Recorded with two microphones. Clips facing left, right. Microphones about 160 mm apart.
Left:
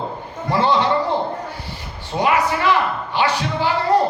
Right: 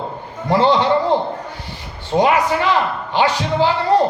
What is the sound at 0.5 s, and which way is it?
Speech, 15° right (ahead or behind).